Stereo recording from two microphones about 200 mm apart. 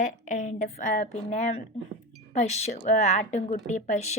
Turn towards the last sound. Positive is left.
turn(degrees=35)  # may be behind; listen again after turning